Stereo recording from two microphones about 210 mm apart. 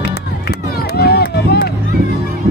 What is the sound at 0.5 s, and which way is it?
Run, 50° left (ahead or behind).